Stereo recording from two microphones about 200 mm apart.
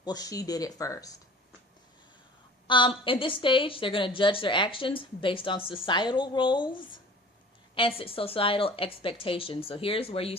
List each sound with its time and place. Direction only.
0.0 s speech: 20° left (ahead or behind)
2.6 s a woman's voice: 25° left (ahead or behind)
7.8 s a woman's voice: 25° left (ahead or behind)